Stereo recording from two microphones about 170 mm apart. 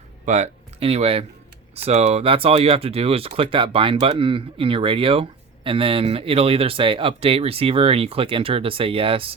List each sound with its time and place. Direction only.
0.3 s speech: 40° right (ahead or behind)